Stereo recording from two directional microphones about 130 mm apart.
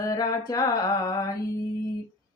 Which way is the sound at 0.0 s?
25° left (ahead or behind).